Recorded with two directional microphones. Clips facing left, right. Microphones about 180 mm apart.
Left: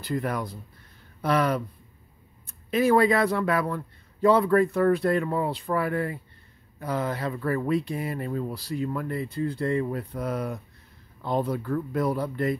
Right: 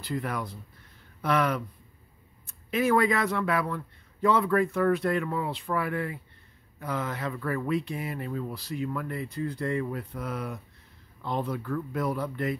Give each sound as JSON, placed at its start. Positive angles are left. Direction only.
{"t": 0.0, "sound": "speech", "side_deg": 45}